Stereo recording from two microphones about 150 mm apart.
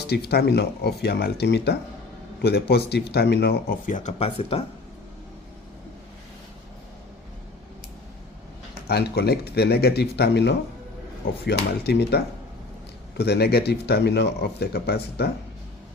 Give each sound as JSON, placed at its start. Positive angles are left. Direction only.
{"t": 0.1, "sound": "speech", "side_deg": 90}
{"t": 8.9, "sound": "speech", "side_deg": 90}
{"t": 11.4, "sound": "speech", "side_deg": 90}